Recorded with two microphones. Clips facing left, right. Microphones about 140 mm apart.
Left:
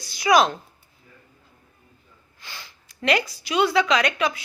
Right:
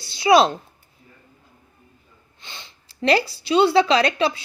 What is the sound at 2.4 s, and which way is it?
A woman's voice, 25° right (ahead or behind).